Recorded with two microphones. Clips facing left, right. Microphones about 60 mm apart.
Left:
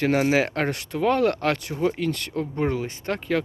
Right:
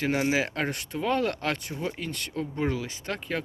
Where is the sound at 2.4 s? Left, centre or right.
Left.